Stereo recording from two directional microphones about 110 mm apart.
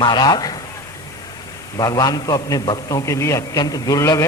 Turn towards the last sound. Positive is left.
turn(degrees=30)  # may be behind; listen again after turning